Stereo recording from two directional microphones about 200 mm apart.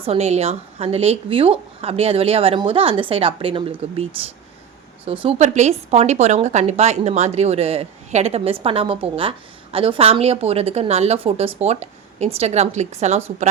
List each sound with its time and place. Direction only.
0.0 s speech: 30° right (ahead or behind)
5.0 s a woman's voice: 25° right (ahead or behind)